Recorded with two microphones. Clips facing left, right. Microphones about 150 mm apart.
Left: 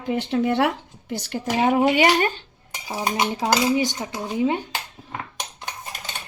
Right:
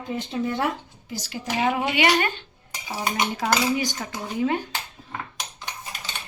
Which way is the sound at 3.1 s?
30° left (ahead or behind).